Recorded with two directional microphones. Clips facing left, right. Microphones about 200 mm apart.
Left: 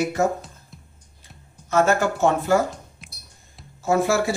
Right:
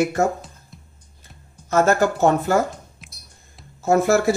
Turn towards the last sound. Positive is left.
turn(degrees=-45)  # may be behind; listen again after turning